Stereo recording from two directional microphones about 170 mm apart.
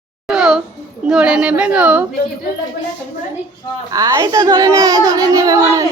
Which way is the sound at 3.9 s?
20° right (ahead or behind).